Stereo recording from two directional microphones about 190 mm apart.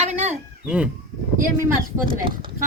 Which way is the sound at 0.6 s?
5° right (ahead or behind).